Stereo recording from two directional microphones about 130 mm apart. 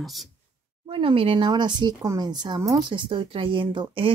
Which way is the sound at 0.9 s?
45° right (ahead or behind).